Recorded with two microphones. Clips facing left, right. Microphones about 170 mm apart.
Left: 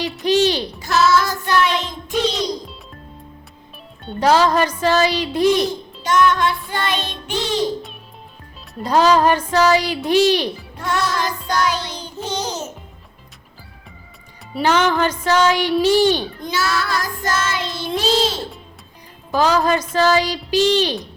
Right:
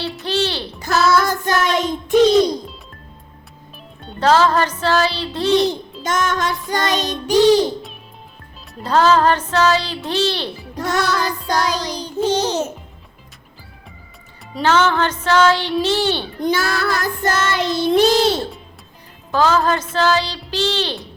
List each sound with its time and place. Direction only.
0.0 s speech: 15° left (ahead or behind)
0.9 s child singing: 55° right (ahead or behind)
4.2 s speech: 15° left (ahead or behind)
6.0 s music: 45° right (ahead or behind)
8.8 s speech: 15° left (ahead or behind)
11.2 s music: 35° right (ahead or behind)
14.5 s speech: 15° left (ahead or behind)
16.4 s child singing: 55° right (ahead or behind)
19.3 s speech: 15° left (ahead or behind)